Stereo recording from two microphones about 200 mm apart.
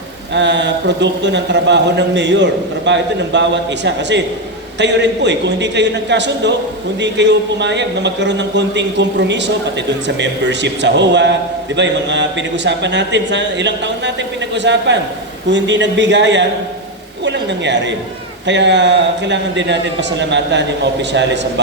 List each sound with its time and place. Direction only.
0.3 s a man's voice: 60° right (ahead or behind)